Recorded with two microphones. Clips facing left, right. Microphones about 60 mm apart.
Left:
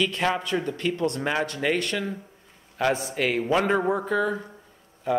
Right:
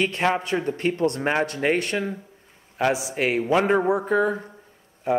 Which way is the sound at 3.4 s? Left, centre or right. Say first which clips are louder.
Right 3 dB; centre.